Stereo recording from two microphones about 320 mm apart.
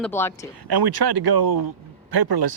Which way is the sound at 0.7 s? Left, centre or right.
Right.